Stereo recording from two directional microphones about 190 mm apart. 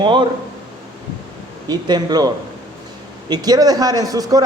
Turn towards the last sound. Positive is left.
turn(degrees=-20)  # may be behind; listen again after turning